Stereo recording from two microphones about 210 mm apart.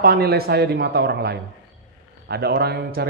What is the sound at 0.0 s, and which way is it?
A man's voice, 45° right (ahead or behind).